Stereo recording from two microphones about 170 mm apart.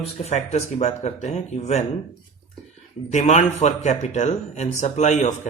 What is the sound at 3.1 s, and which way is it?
Speech, 40° left (ahead or behind).